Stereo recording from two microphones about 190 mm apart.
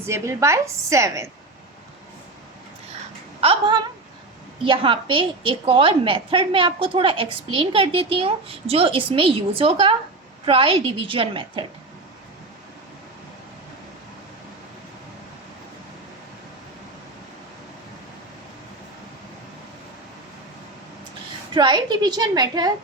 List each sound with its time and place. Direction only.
0.0 s a woman's voice: 15° right (ahead or behind)
3.4 s a woman's voice: 30° right (ahead or behind)
21.5 s a woman's voice: 25° right (ahead or behind)